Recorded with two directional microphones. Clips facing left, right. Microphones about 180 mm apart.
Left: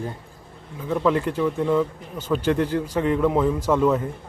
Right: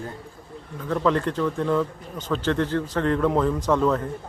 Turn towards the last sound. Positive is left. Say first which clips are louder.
# left 1 dB
turn(degrees=10)  # may be behind; listen again after turning